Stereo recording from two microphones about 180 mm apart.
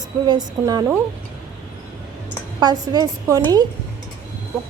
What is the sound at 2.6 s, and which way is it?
A woman's voice, 20° right (ahead or behind).